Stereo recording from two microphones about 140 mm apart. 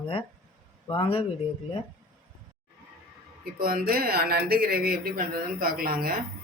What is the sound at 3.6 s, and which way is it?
Speech, 90° right.